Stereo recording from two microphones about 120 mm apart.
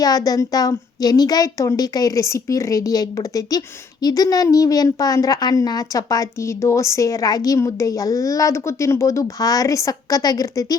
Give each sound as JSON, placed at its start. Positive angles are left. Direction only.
{"t": 0.0, "sound": "a woman's voice", "side_deg": 30}